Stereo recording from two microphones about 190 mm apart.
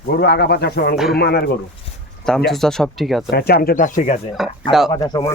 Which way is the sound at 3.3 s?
55° left (ahead or behind).